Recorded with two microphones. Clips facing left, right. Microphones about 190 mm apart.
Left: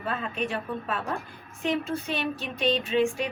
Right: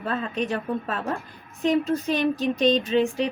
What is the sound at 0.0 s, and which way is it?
A woman's voice, 40° right (ahead or behind).